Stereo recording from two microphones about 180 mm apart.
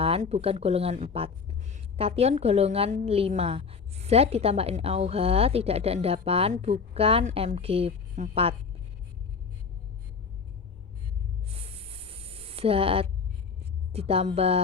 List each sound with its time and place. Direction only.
0.0 s speech: 35° right (ahead or behind)
11.5 s a sound: 30° right (ahead or behind)
13.9 s speech: 35° right (ahead or behind)